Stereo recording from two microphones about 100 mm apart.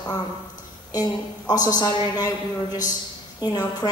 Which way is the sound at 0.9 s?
40° left (ahead or behind).